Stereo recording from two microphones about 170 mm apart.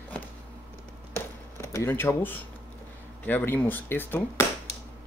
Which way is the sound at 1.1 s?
15° left (ahead or behind).